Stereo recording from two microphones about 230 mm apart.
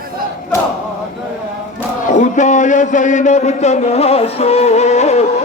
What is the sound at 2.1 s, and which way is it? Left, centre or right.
A man's voice, left.